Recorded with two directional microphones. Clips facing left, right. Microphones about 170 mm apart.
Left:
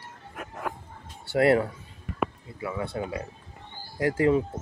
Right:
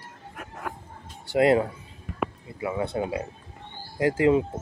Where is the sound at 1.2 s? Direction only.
20° right (ahead or behind).